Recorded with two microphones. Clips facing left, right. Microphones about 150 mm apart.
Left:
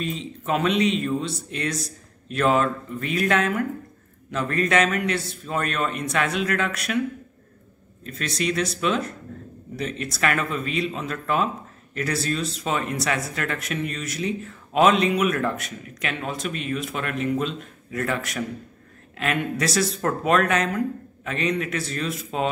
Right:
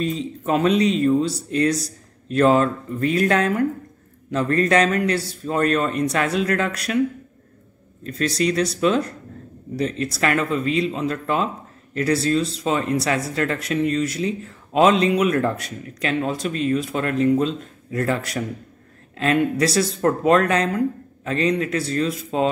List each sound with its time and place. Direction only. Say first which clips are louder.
0.0 s speech: right 5 dB; 35° right (ahead or behind)
8.0 s speech: right 6 dB; 35° right (ahead or behind)